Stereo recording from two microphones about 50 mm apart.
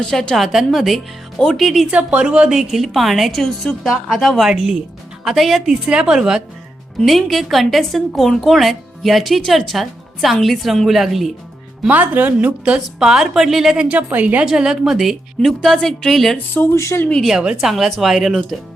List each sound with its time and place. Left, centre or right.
0.0 s a woman's voice: centre
0.3 s speech: centre
1.9 s a woman's voice: right
2.6 s a woman's voice: centre
7.0 s a woman's voice: centre
11.9 s a woman's voice: right
13.0 s a woman's voice: centre
13.7 s a woman's voice: right
14.4 s a woman's voice: centre
15.4 s speech: centre
16.7 s speech: left
17.2 s a woman's voice: centre